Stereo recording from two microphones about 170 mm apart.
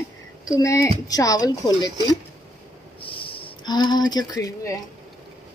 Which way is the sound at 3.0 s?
30° left (ahead or behind).